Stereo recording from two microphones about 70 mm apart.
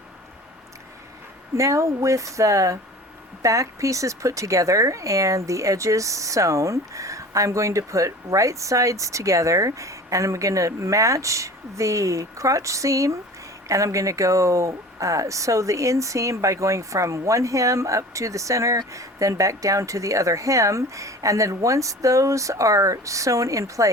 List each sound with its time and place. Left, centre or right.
1.5 s speech: right